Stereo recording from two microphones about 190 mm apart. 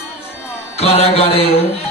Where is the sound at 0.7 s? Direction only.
30° left (ahead or behind).